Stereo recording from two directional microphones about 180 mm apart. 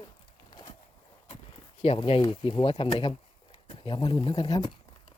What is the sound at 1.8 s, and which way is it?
Speech, 30° left (ahead or behind).